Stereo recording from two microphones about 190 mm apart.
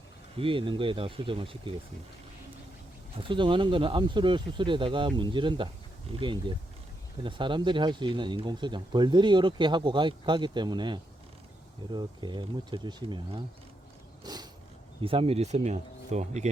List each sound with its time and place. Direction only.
0.3 s speech: 30° right (ahead or behind)
3.2 s speech: 25° right (ahead or behind)
14.3 s a sound: 20° right (ahead or behind)
15.0 s speech: 30° right (ahead or behind)